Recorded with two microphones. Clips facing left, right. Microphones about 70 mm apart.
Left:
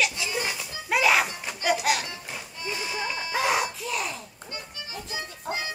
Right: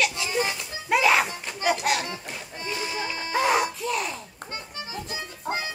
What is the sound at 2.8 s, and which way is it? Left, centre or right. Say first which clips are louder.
Sheep: even; right.